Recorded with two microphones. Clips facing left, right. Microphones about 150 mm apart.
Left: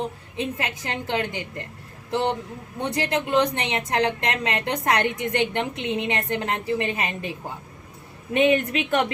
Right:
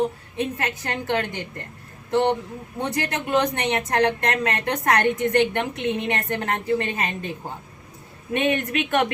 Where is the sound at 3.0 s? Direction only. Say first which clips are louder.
Left 2 dB; 25° left (ahead or behind).